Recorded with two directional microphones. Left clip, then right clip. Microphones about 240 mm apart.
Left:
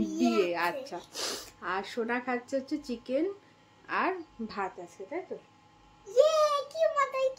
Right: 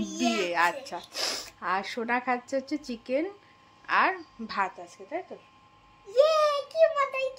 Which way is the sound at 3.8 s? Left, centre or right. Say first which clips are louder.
Right 6 dB; centre.